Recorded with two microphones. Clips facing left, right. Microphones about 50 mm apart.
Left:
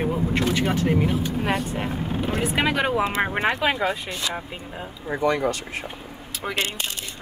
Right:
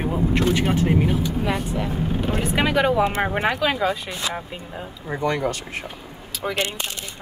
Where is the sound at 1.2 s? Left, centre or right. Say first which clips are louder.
Even; left.